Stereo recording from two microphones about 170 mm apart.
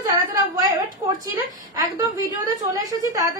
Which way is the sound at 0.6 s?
20° right (ahead or behind).